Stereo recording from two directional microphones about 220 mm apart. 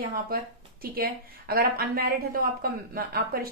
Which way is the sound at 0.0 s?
40° right (ahead or behind).